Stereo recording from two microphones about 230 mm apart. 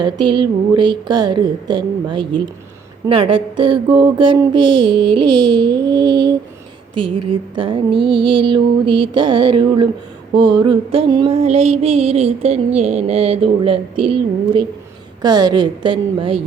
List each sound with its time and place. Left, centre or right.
0.0 s music: centre
7.5 s music: right